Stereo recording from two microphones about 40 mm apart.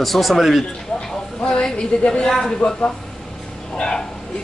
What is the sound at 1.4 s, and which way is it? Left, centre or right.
A woman's voice, left.